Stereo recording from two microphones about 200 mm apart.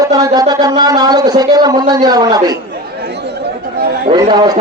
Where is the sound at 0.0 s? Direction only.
20° right (ahead or behind).